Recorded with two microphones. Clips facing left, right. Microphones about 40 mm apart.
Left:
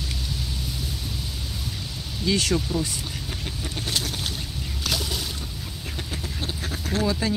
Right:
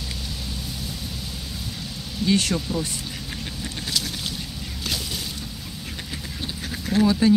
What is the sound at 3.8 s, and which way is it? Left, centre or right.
Boat, left.